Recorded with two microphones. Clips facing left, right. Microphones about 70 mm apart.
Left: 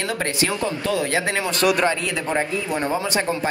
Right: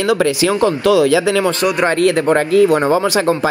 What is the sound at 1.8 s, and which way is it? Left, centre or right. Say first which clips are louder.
Speech: right 10 dB; right.